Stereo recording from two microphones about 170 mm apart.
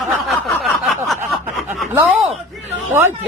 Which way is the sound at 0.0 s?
Centre (ahead or behind).